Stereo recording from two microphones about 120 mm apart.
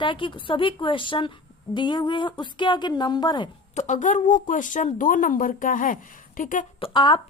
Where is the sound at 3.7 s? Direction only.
80° left.